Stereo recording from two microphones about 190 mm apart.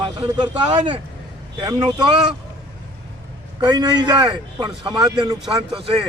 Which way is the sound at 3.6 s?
20° right (ahead or behind).